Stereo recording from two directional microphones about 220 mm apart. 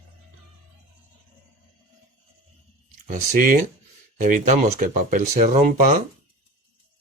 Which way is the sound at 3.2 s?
40° right (ahead or behind).